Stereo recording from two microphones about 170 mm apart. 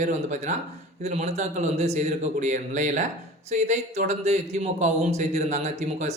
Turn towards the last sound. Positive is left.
turn(degrees=-40)  # may be behind; listen again after turning